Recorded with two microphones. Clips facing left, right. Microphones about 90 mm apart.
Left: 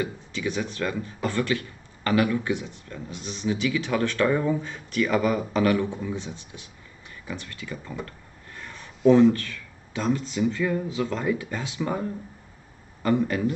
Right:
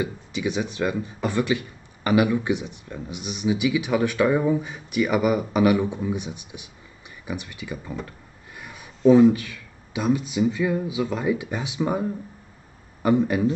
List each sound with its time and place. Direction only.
0.0 s speech: 15° right (ahead or behind)
8.5 s a sound: 10° right (ahead or behind)
9.0 s speech: 10° right (ahead or behind)